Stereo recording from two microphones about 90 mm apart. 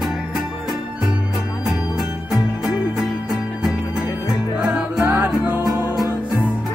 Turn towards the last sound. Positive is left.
turn(degrees=-20)  # may be behind; listen again after turning